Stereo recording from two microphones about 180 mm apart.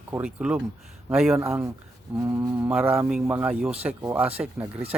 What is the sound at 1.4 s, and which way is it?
A man's voice, 15° right (ahead or behind).